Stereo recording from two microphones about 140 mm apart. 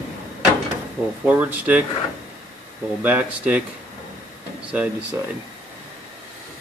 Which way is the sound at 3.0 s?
10° right (ahead or behind).